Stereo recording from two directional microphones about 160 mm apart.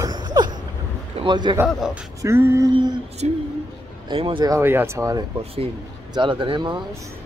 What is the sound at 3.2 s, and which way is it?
Speech, 40° right (ahead or behind).